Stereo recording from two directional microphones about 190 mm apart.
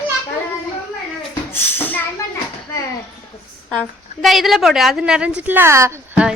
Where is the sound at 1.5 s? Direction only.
10° left (ahead or behind).